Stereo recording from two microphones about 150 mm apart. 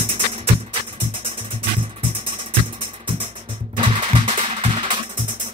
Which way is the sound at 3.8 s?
35° right (ahead or behind).